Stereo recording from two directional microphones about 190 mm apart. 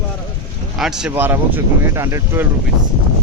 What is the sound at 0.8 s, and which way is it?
Speech, 5° right (ahead or behind).